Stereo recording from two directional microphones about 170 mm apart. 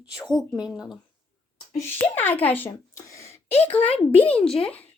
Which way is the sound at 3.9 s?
35° left (ahead or behind).